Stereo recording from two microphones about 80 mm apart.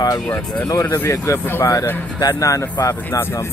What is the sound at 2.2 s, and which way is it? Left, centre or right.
Speech, left.